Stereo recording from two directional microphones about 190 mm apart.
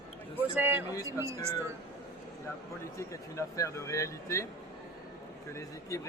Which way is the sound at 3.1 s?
15° left (ahead or behind).